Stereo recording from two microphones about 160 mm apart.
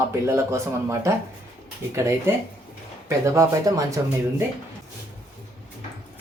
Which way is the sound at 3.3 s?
20° right (ahead or behind).